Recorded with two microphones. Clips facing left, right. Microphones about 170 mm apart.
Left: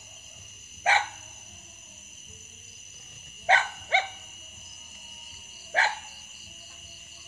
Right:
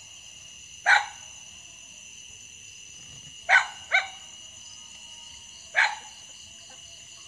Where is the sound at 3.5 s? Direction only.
30° left (ahead or behind).